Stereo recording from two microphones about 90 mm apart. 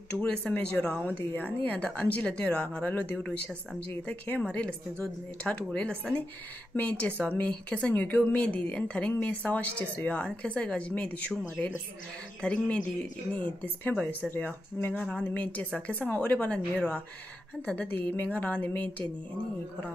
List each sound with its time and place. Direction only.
0.1 s a woman's voice: 10° left (ahead or behind)
15.0 s a woman's voice: 10° left (ahead or behind)